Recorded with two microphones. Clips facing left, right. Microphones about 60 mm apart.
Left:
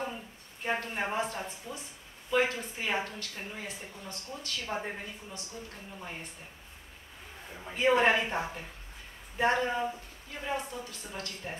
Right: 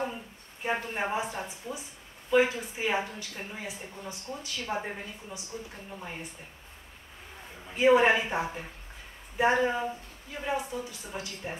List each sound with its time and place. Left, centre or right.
0.7 s a woman's voice: centre
7.7 s a woman's voice: centre